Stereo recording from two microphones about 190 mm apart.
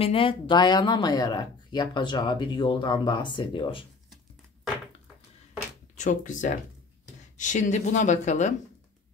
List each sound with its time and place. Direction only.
0.0 s speech: 30° left (ahead or behind)
5.9 s speech: 40° left (ahead or behind)